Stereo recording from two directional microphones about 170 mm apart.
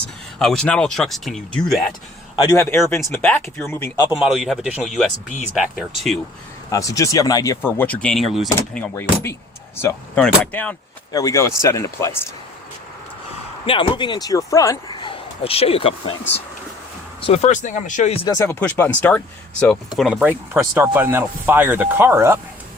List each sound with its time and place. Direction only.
0.3 s speech: 5° left (ahead or behind)
2.3 s a man's voice: 30° left (ahead or behind)
2.6 s speech: 15° left (ahead or behind)
4.2 s speech: 5° right (ahead or behind)
6.7 s speech: 20° left (ahead or behind); by 8.4 s centre (ahead or behind)
8.7 s speech: 10° left (ahead or behind)
11.1 s speech: 20° left (ahead or behind)
13.7 s speech: 30° left (ahead or behind)
15.0 s a sound: 35° left (ahead or behind)
17.2 s speech: 35° left (ahead or behind)
18.3 s speech: 15° left (ahead or behind); by 22.4 s 15° right (ahead or behind)